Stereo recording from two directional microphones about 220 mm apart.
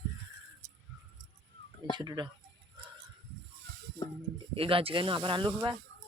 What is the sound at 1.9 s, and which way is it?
Speech, 20° right (ahead or behind).